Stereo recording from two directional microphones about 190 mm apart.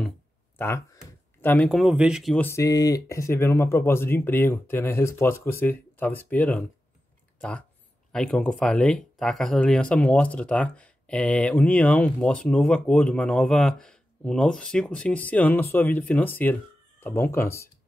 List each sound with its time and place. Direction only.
0.6 s speech: 15° left (ahead or behind)
2.4 s speech: 15° left (ahead or behind)
8.1 s speech: 5° left (ahead or behind)